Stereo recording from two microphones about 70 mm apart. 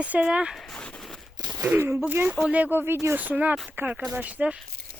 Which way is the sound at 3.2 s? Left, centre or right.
Right.